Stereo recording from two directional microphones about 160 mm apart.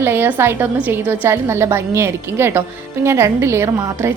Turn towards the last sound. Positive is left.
turn(degrees=-15)  # may be behind; listen again after turning